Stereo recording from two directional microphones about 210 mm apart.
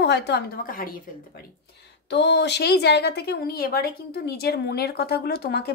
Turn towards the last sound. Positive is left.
turn(degrees=50)  # may be behind; listen again after turning